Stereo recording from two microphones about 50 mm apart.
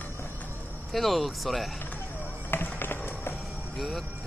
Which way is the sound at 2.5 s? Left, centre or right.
Left.